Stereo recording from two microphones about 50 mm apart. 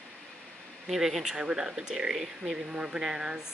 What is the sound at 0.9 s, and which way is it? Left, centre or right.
Speech, centre.